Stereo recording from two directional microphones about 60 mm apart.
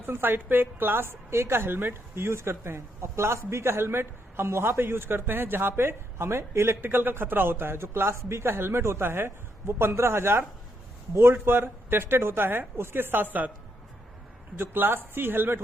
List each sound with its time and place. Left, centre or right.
0.0 s a woman's voice: right
14.5 s a woman's voice: right